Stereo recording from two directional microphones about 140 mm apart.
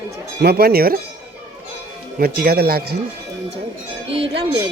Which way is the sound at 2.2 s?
90° right.